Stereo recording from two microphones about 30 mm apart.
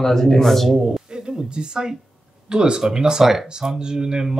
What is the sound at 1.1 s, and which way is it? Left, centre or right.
Speech, right.